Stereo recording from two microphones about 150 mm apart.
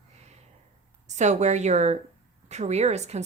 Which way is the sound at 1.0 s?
50° right (ahead or behind).